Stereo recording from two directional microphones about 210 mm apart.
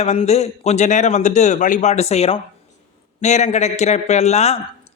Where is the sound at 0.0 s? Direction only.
30° left (ahead or behind).